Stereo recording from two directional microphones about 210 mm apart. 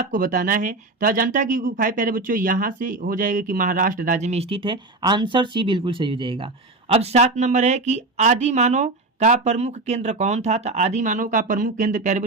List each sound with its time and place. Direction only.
0.1 s speech: 40° right (ahead or behind)